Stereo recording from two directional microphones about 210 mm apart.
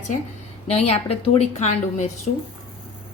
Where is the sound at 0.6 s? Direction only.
30° left (ahead or behind).